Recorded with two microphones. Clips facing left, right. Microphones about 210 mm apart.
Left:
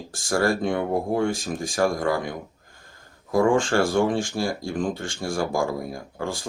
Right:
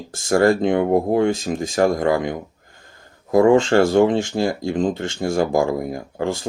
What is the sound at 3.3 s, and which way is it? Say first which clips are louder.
Speech: right 6 dB; 20° right (ahead or behind).